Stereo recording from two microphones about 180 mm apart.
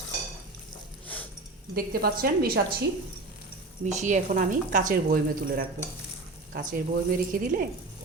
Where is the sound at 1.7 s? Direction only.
55° right (ahead or behind).